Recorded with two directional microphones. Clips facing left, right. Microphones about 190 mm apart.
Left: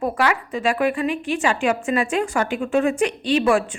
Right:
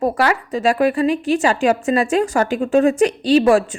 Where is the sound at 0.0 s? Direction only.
40° right (ahead or behind).